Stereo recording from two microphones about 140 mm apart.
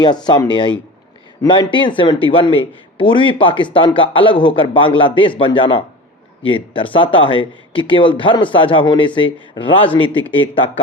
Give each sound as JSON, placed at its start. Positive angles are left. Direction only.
{"t": 0.0, "sound": "speech", "side_deg": 30}
{"t": 10.1, "sound": "speech", "side_deg": 10}